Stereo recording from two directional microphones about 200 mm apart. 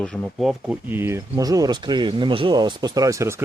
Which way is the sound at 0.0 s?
5° left (ahead or behind).